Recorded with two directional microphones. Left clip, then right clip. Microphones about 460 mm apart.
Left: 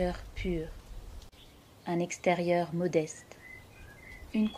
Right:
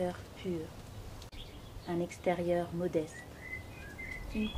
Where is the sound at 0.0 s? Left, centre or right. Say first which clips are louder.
Left 3 dB; centre.